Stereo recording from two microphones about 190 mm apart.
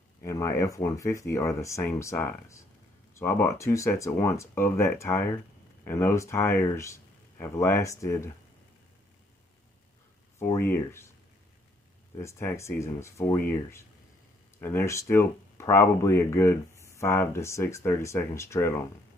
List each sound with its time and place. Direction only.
0.2 s speech: 15° left (ahead or behind)
10.4 s speech: 10° left (ahead or behind)
12.2 s speech: 15° left (ahead or behind)